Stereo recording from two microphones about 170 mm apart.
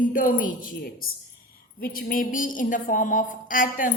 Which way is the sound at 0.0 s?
55° left (ahead or behind).